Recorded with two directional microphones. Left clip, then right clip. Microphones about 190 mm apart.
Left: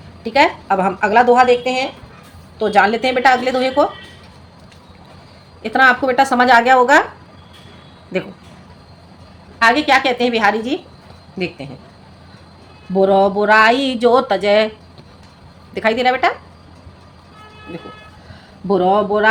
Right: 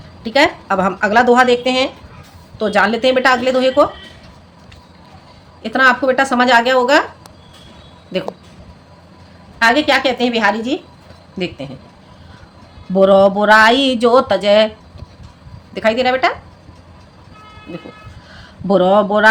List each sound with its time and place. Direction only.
0.3 s speech: 10° right (ahead or behind)
2.6 s speech: 10° right (ahead or behind)
5.6 s speech: 5° right (ahead or behind)
9.6 s speech: 5° right (ahead or behind)
12.9 s speech: 15° right (ahead or behind)
15.7 s speech: centre (ahead or behind)
18.7 s a man's voice: 25° right (ahead or behind)